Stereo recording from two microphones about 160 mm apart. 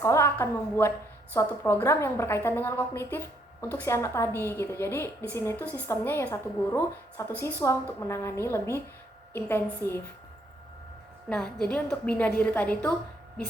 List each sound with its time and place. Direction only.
0.0 s a woman's voice: 15° left (ahead or behind)
11.3 s a woman's voice: centre (ahead or behind)